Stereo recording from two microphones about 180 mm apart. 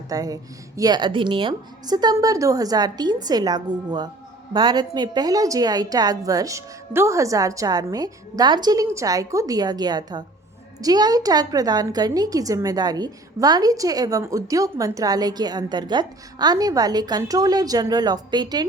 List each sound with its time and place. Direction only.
0.1 s a woman's voice: 20° right (ahead or behind)